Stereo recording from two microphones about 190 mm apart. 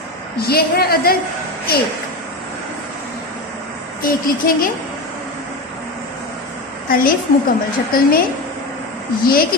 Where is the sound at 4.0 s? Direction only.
50° left (ahead or behind).